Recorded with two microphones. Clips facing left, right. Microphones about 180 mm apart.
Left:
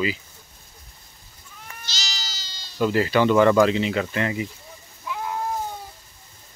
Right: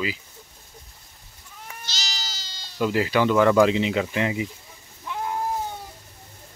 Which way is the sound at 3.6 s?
15° right (ahead or behind).